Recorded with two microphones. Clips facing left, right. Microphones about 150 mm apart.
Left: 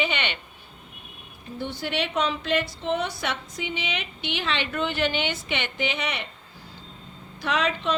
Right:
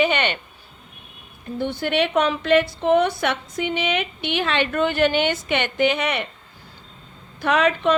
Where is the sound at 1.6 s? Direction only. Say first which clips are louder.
Right 7 dB; 55° right (ahead or behind).